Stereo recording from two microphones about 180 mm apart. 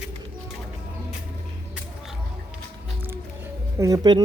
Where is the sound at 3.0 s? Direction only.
15° right (ahead or behind).